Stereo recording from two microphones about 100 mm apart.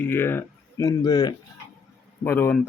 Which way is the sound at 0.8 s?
35° left (ahead or behind).